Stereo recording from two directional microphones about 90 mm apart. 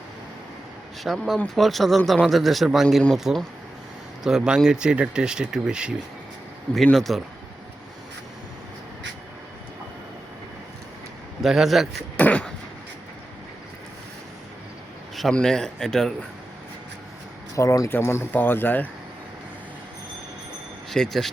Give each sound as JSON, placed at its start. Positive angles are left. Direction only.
{"t": 1.0, "sound": "a man's voice", "side_deg": 0}
{"t": 6.9, "sound": "a man's voice", "side_deg": 0}
{"t": 11.4, "sound": "a man's voice", "side_deg": -5}
{"t": 12.1, "sound": "a sound", "side_deg": 15}
{"t": 15.1, "sound": "a man's voice", "side_deg": 5}
{"t": 17.5, "sound": "speech", "side_deg": 35}
{"t": 20.9, "sound": "a man's voice", "side_deg": 5}